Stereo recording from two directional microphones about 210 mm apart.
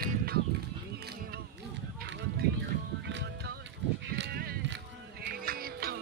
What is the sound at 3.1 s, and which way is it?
Music, 60° right (ahead or behind).